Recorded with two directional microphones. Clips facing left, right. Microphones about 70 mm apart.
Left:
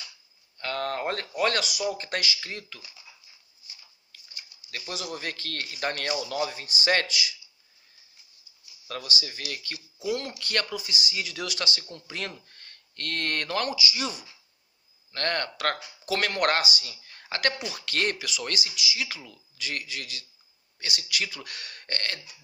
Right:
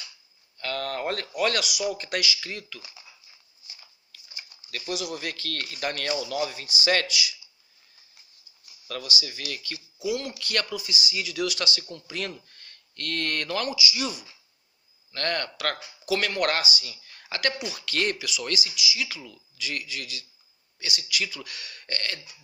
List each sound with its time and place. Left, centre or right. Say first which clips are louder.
0.6 s a sound: even; left
1.4 s speech: even; left
4.7 s speech: right 3 dB; left
8.9 s speech: right 1 dB; left
11.4 s speech: right 3 dB; left
16.9 s speech: left 1 dB; left